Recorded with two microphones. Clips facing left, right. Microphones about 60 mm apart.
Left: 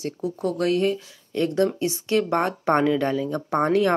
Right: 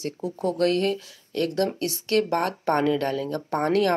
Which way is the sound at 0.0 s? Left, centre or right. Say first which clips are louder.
Left 1 dB; centre.